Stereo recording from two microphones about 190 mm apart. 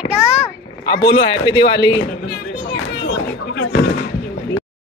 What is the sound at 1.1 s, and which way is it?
Speech, 25° left (ahead or behind).